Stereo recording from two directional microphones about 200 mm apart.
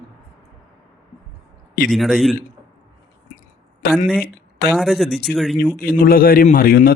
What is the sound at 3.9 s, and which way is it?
Speech, 5° right (ahead or behind).